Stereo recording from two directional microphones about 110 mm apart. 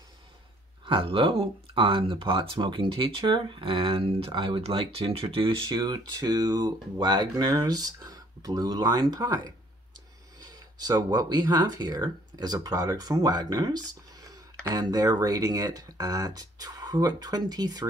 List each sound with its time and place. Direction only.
0.8 s speech: 50° right (ahead or behind); by 17.8 s 35° right (ahead or behind)